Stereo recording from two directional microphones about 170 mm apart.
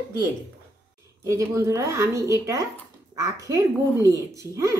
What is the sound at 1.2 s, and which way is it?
Speech, 15° right (ahead or behind).